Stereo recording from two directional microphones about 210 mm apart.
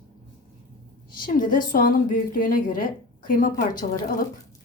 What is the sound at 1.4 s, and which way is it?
A woman's voice, 40° left (ahead or behind).